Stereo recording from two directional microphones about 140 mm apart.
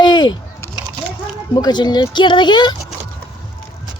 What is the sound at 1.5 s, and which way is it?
Speech, 30° left (ahead or behind).